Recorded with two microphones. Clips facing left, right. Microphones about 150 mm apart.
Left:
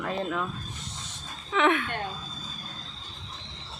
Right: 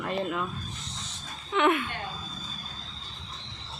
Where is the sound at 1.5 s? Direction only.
5° right (ahead or behind).